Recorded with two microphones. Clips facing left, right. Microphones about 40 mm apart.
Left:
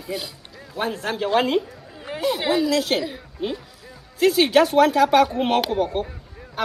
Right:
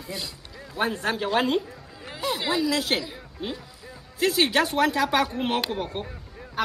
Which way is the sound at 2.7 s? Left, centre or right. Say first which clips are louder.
Left 4 dB; centre.